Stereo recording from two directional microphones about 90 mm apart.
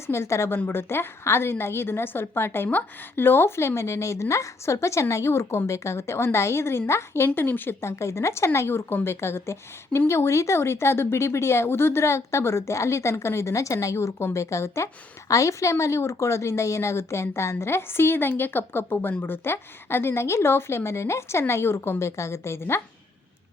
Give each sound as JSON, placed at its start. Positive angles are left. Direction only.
{"t": 0.1, "sound": "a woman's voice", "side_deg": 30}